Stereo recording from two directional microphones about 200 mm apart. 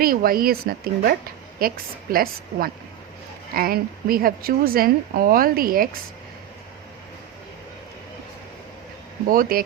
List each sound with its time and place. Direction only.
0.0 s a woman's voice: 45° right (ahead or behind)
9.3 s a woman's voice: 45° right (ahead or behind)